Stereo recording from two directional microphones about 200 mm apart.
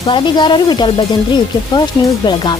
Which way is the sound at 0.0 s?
25° left (ahead or behind).